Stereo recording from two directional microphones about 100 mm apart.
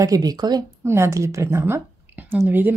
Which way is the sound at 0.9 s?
30° right (ahead or behind).